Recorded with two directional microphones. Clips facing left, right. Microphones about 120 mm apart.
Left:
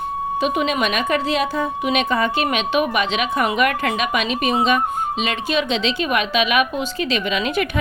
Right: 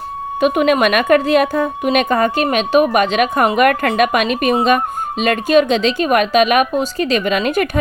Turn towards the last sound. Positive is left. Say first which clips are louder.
# right 5 dB
turn(degrees=-45)  # may be behind; listen again after turning